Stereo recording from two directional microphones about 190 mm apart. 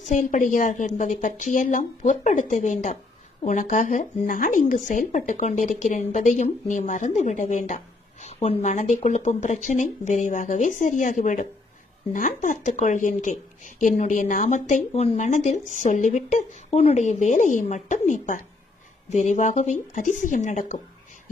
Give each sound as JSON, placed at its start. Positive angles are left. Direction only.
{"t": 0.1, "sound": "a woman's voice", "side_deg": 40}